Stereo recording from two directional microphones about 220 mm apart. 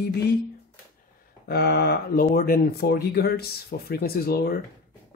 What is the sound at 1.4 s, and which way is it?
Speech, 45° left (ahead or behind).